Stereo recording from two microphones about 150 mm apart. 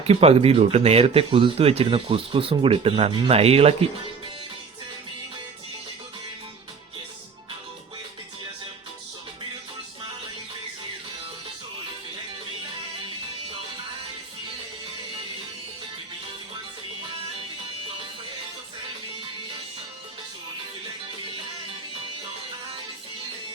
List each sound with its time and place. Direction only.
0.1 s speech: 40° right (ahead or behind)